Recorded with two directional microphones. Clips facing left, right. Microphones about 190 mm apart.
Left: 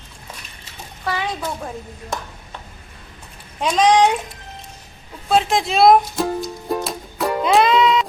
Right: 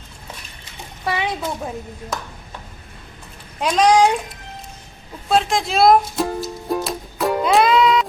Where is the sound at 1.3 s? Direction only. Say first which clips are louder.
Right 1 dB; 10° right (ahead or behind).